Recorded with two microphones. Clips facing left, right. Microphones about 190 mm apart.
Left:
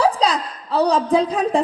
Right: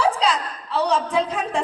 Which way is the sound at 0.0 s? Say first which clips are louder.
Left 3 dB; 35° left (ahead or behind).